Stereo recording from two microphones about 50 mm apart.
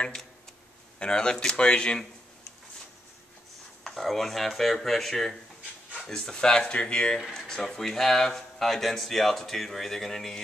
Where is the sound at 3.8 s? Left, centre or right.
Centre.